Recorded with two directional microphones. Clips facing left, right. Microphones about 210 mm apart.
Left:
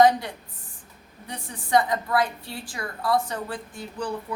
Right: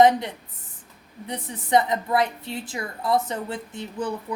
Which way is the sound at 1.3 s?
20° right (ahead or behind).